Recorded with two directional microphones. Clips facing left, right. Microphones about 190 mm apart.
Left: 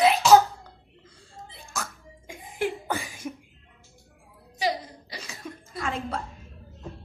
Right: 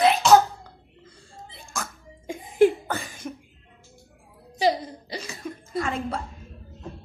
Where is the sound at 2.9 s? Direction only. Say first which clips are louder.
Even; 10° left (ahead or behind).